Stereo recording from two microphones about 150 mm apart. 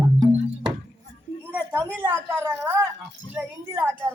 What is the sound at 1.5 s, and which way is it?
A woman's voice, 15° right (ahead or behind).